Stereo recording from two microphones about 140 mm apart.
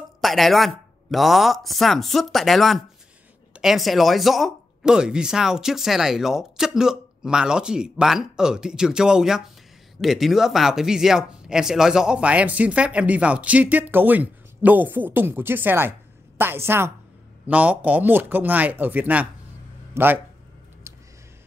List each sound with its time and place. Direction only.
0.2 s speech: centre (ahead or behind); by 20.2 s 15° right (ahead or behind)